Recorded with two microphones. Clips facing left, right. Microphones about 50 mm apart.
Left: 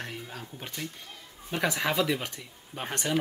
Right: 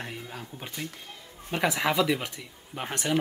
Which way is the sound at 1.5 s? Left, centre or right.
Centre.